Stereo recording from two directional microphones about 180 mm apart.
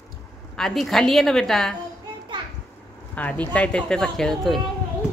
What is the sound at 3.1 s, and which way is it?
A woman's voice, 10° left (ahead or behind).